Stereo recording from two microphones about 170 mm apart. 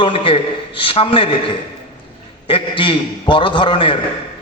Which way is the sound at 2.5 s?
30° left (ahead or behind).